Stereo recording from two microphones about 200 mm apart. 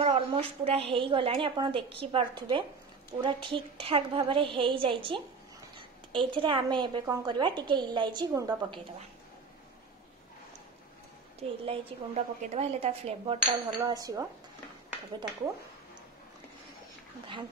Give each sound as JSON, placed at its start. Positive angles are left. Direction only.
{"t": 0.0, "sound": "a woman's voice", "side_deg": -25}
{"t": 11.6, "sound": "a woman's voice", "side_deg": -30}